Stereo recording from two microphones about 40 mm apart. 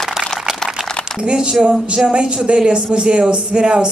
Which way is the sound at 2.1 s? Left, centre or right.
Right.